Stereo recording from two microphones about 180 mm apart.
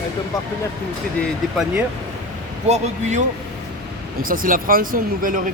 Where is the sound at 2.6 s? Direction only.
40° right (ahead or behind).